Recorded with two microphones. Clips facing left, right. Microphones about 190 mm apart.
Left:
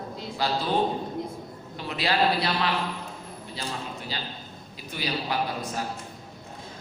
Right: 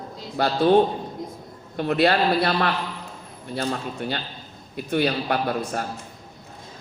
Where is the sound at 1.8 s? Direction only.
55° right (ahead or behind).